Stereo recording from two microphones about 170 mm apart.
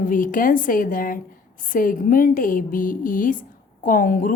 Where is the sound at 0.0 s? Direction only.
55° left (ahead or behind).